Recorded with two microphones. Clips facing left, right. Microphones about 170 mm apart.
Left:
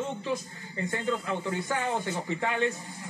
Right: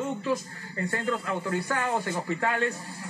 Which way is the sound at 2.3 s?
20° left (ahead or behind).